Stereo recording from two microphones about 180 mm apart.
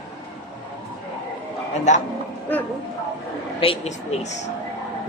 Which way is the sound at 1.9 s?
40° left (ahead or behind).